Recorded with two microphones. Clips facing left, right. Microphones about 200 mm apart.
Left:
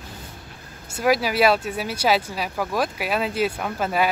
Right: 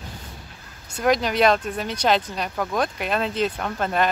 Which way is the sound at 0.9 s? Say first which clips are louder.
Even; 5° left (ahead or behind).